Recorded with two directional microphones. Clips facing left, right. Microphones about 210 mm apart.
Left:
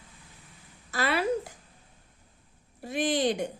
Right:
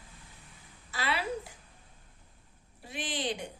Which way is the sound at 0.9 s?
45° left (ahead or behind).